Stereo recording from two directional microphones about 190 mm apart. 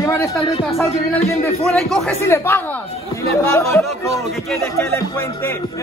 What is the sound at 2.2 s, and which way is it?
Speech, 10° left (ahead or behind).